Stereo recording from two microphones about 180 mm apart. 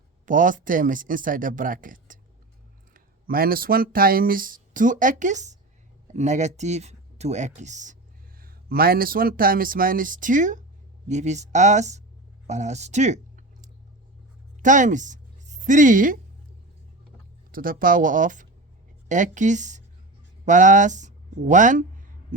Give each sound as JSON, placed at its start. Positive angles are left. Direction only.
{"t": 0.3, "sound": "speech", "side_deg": -45}
{"t": 8.4, "sound": "speech", "side_deg": -55}
{"t": 17.5, "sound": "speech", "side_deg": -50}